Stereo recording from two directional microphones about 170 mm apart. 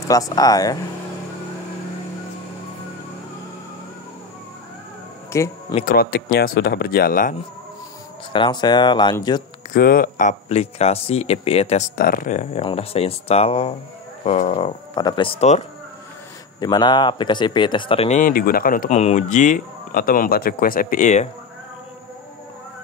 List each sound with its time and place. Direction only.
0.1 s speech: 20° left (ahead or behind)
5.3 s a sound: 15° left (ahead or behind)
5.9 s speech: 60° left (ahead or behind)
8.3 s speech: 25° left (ahead or behind)
9.8 s speech: 55° left (ahead or behind); by 11.9 s 40° left (ahead or behind)
12.0 s speech: 55° left (ahead or behind)
12.6 s speech: 35° left (ahead or behind)
15.0 s speech: 25° left (ahead or behind)
16.5 s speech: 25° left (ahead or behind)
18.2 s speech: 60° left (ahead or behind)
18.9 s speech: 40° left (ahead or behind)